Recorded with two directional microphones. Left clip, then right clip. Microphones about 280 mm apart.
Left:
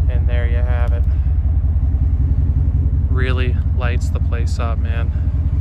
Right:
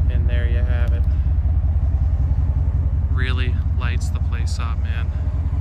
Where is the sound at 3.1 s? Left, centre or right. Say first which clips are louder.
Left 4 dB; centre.